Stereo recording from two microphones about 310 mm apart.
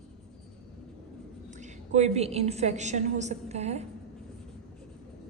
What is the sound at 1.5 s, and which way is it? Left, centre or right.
A woman's voice, right.